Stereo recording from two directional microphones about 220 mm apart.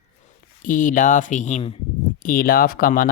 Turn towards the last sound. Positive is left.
turn(degrees=40)  # may be behind; listen again after turning